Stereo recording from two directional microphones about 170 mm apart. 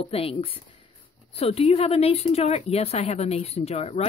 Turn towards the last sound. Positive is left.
turn(degrees=40)  # may be behind; listen again after turning